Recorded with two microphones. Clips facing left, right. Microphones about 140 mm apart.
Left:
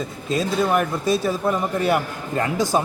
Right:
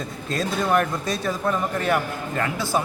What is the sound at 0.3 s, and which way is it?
Speech, 5° left (ahead or behind).